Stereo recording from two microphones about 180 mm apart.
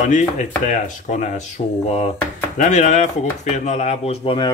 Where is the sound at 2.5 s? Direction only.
40° left (ahead or behind).